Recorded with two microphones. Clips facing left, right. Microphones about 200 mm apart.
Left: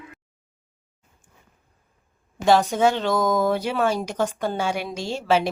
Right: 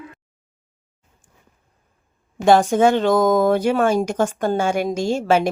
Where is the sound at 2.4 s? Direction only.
50° right (ahead or behind).